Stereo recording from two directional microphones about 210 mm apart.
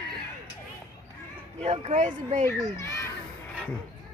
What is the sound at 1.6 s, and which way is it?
Speech, 35° right (ahead or behind).